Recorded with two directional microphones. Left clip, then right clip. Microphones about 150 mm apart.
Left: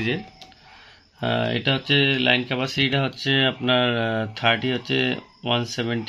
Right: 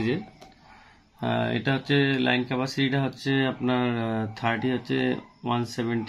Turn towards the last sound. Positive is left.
turn(degrees=35)  # may be behind; listen again after turning